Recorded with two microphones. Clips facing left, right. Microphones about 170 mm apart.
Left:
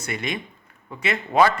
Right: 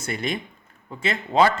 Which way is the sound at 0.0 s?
30° right (ahead or behind).